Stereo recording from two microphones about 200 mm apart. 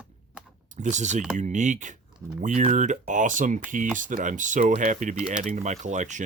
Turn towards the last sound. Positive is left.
turn(degrees=-35)  # may be behind; listen again after turning